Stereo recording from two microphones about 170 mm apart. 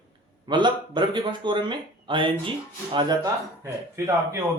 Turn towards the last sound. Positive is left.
turn(degrees=-15)  # may be behind; listen again after turning